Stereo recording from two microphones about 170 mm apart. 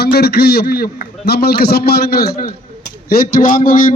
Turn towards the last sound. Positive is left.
turn(degrees=55)  # may be behind; listen again after turning